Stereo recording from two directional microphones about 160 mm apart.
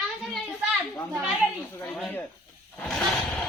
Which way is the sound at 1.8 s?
5° left (ahead or behind).